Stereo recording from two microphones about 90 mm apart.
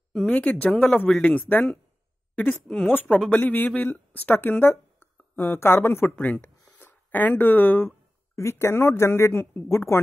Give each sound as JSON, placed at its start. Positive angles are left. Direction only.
{"t": 0.1, "sound": "speech", "side_deg": 10}
{"t": 2.8, "sound": "speech", "side_deg": 20}